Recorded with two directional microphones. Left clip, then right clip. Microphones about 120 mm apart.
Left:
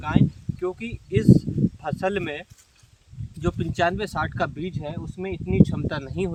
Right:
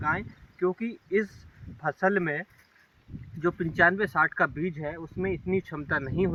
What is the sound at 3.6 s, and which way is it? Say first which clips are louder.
Speech: right 1 dB; 30° left (ahead or behind).